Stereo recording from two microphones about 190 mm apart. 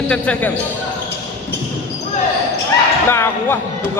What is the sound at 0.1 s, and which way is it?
Speech, 10° left (ahead or behind).